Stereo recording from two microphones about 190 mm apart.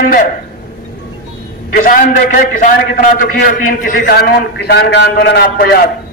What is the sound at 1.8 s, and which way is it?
A man's voice, 45° left (ahead or behind).